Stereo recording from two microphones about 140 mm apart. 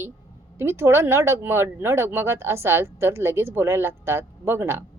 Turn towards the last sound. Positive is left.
turn(degrees=-15)  # may be behind; listen again after turning